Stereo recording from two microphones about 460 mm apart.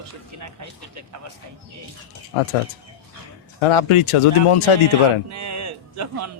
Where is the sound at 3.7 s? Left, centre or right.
Left.